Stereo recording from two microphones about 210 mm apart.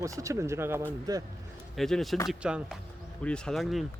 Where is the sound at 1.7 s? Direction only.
Centre (ahead or behind).